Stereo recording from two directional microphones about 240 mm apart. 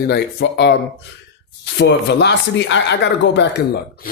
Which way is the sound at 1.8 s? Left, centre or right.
Left.